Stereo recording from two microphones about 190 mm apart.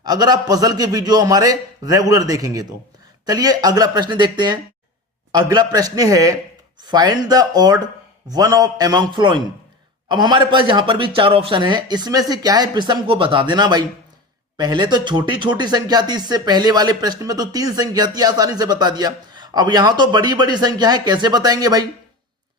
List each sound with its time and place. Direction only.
0.0 s speech: 20° right (ahead or behind)